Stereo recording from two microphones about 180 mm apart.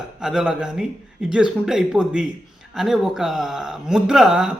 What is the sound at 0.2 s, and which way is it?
Speech, 5° right (ahead or behind).